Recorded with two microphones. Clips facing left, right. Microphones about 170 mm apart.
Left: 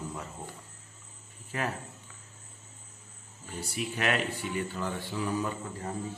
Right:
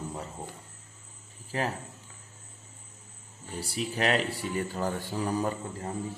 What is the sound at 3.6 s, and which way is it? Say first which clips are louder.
Speech: right 3 dB; 35° right (ahead or behind).